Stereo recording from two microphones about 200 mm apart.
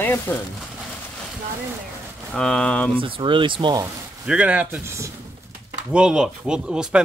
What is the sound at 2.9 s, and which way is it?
Speech, 25° right (ahead or behind).